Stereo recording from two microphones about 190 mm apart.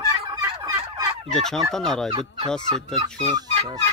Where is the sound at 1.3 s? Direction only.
Centre (ahead or behind).